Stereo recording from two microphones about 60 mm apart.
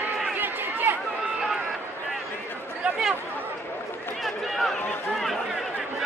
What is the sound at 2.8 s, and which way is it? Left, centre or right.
Chatter, right.